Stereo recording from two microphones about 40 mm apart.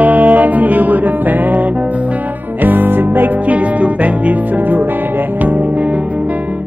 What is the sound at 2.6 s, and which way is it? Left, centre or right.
Music, right.